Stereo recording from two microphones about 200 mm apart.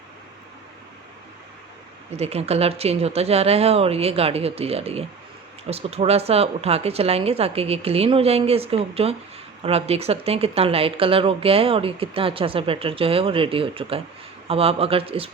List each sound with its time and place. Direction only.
2.1 s speech: 30° right (ahead or behind)